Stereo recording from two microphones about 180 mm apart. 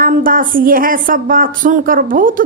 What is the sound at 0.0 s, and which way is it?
Speech, 50° right (ahead or behind).